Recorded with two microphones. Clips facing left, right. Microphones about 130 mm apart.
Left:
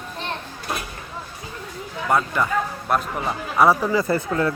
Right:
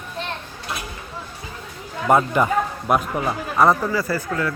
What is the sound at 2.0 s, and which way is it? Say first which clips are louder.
Speech: right 4 dB; 20° right (ahead or behind).